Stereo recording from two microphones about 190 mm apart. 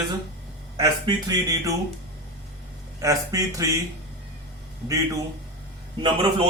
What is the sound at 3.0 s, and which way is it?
Speech, 15° right (ahead or behind).